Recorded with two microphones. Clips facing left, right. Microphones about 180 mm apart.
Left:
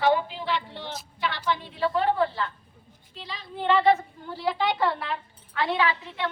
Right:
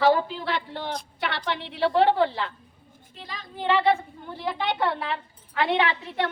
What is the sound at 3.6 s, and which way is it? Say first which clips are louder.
A woman's voice: left 1 dB; 10° right (ahead or behind).